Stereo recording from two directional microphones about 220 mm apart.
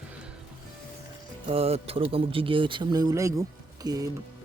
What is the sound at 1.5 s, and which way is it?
Speech, 25° right (ahead or behind).